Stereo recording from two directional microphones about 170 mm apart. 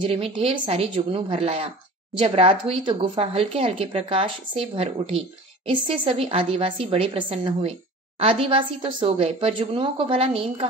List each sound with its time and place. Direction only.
0.0 s speech: 35° right (ahead or behind)